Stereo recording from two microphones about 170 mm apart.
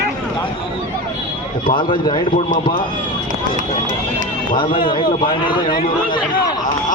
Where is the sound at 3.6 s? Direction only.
50° right (ahead or behind).